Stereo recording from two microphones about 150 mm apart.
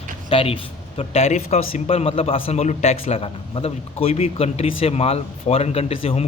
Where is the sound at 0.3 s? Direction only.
35° left (ahead or behind).